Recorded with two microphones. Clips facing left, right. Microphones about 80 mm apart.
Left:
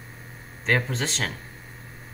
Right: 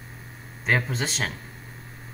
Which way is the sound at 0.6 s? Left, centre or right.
Centre.